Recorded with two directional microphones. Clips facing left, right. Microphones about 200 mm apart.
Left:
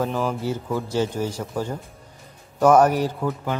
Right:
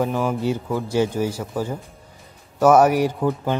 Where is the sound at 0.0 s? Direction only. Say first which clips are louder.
Right 3 dB; 5° right (ahead or behind).